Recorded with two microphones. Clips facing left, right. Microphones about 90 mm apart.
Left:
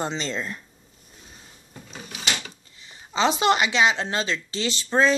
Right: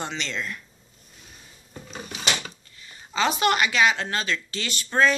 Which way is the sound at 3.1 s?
25° left (ahead or behind).